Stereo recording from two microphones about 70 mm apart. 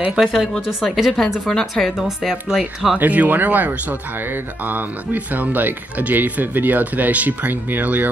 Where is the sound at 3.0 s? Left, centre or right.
Right.